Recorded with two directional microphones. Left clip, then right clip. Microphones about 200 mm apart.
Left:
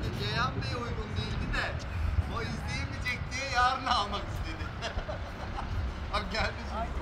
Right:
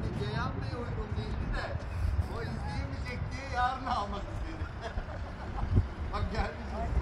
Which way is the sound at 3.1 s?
25° left (ahead or behind).